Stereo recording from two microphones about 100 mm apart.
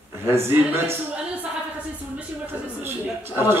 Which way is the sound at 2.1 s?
20° right (ahead or behind).